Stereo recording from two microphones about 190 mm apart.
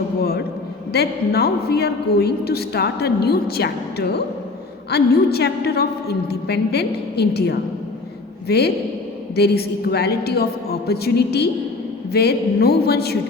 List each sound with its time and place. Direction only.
0.9 s a woman's voice: 55° left (ahead or behind)